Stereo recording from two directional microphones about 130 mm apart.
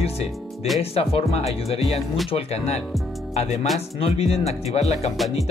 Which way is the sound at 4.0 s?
50° left (ahead or behind).